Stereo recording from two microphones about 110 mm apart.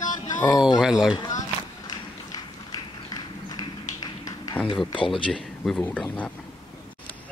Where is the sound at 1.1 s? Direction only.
40° left (ahead or behind).